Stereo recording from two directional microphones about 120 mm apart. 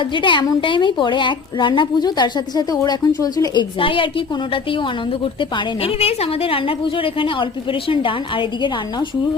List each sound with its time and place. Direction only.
0.0 s a woman's voice: 40° left (ahead or behind)
5.2 s a woman's voice: 45° left (ahead or behind)